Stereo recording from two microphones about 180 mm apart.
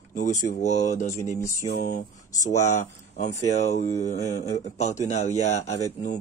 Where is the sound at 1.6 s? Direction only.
45° left (ahead or behind).